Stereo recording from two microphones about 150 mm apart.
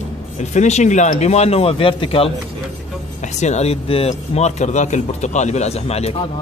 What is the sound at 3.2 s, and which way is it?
Speech, 50° left (ahead or behind).